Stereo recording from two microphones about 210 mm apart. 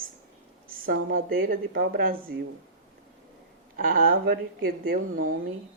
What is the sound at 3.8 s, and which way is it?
A woman's voice, 40° right (ahead or behind).